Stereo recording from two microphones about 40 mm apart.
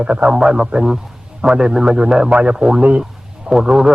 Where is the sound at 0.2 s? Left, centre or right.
Centre.